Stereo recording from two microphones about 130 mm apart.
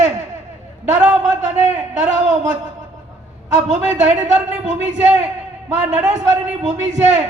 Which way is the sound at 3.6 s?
65° right (ahead or behind).